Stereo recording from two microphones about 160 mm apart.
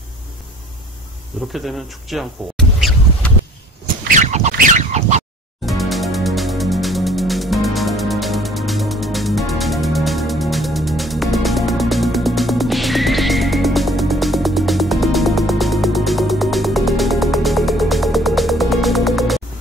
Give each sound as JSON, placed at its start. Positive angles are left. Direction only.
{"t": 1.5, "sound": "a sound", "side_deg": 0}
{"t": 3.8, "sound": "fowl", "side_deg": -50}
{"t": 5.7, "sound": "music", "side_deg": 0}